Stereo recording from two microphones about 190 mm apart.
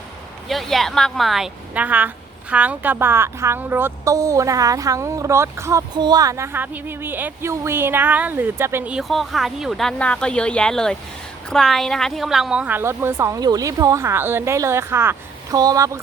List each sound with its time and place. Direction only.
0.4 s a woman's voice: centre (ahead or behind); by 16.0 s 15° right (ahead or behind)